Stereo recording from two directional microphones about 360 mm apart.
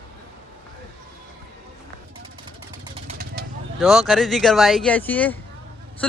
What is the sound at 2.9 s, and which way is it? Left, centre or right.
Vehicle, right.